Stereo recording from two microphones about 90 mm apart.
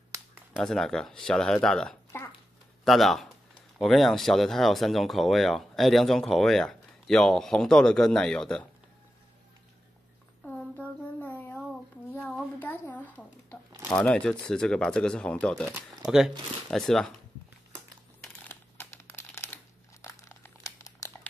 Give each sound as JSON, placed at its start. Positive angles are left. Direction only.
{"t": 0.7, "sound": "speech", "side_deg": 5}
{"t": 11.1, "sound": "a sound", "side_deg": 20}
{"t": 14.0, "sound": "speech", "side_deg": 15}
{"t": 16.7, "sound": "speech", "side_deg": 5}
{"t": 18.5, "sound": "crumpling", "side_deg": 25}